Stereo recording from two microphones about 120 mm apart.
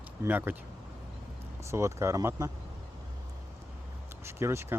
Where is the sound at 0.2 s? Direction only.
15° right (ahead or behind).